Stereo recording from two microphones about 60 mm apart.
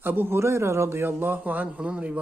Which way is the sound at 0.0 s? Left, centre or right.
Right.